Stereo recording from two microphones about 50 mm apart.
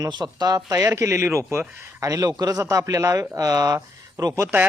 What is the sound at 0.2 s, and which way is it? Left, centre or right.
Speech, right.